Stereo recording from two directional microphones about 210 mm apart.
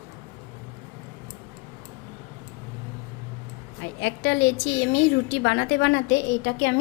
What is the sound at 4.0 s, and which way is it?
A woman's voice, 60° left (ahead or behind).